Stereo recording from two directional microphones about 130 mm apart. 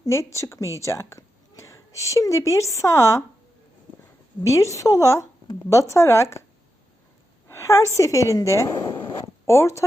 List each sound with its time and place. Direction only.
0.0 s a woman's voice: 20° left (ahead or behind)
4.4 s a woman's voice: 25° left (ahead or behind)
7.4 s a sound: 20° left (ahead or behind)
7.9 s a woman's voice: 25° left (ahead or behind)
9.0 s zipper: 25° left (ahead or behind)